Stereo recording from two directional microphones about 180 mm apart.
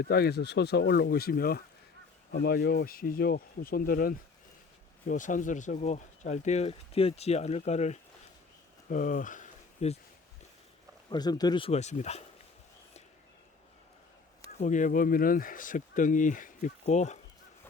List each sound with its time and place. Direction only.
0.0 s speech: 60° left (ahead or behind); by 10.0 s 40° left (ahead or behind)
11.1 s speech: 20° left (ahead or behind); by 12.2 s 40° left (ahead or behind)
14.6 s speech: 45° left (ahead or behind)